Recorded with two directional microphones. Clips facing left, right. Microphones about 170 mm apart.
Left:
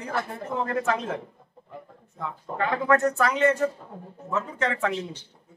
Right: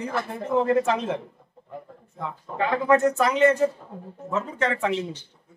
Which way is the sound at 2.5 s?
15° right (ahead or behind).